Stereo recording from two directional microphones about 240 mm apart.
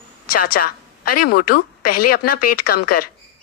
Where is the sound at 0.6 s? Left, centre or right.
Left.